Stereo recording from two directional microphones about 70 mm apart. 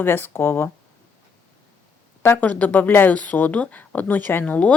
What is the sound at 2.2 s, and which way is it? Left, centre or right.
Speech, left.